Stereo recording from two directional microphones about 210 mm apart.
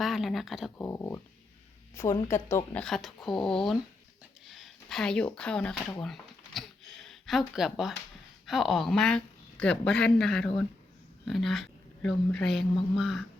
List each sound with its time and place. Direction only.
0.0 s speech: centre (ahead or behind)
0.9 s a woman's voice: 10° left (ahead or behind)
6.0 s a sound: centre (ahead or behind)
8.4 s a woman's voice: centre (ahead or behind)